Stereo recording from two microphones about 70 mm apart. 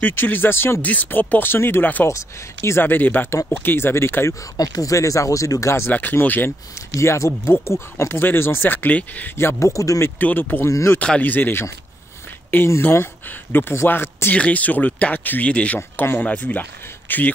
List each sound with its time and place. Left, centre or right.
0.0 s speech: left
0.8 s speech: left
2.0 s speech: left
4.6 s speech: left
5.9 s speech: left
7.0 s speech: left
9.4 s speech: left
10.0 s speech: left
10.7 s speech: left
11.0 s speech: left
14.3 s speech: centre